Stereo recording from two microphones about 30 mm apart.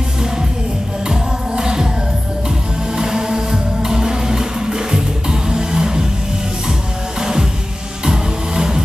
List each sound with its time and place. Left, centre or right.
1.0 s music: right
3.0 s music: right
7.2 s music: right